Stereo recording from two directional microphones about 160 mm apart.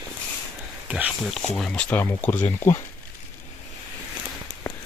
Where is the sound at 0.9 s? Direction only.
5° right (ahead or behind).